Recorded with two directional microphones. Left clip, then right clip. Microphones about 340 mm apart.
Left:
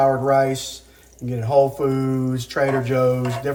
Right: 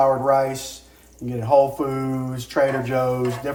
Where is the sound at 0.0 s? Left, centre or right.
Centre.